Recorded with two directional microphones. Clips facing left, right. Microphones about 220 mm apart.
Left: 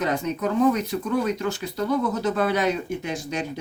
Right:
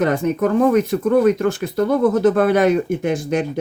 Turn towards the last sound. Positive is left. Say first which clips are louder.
# right 9 dB
turn(degrees=-55)  # may be behind; listen again after turning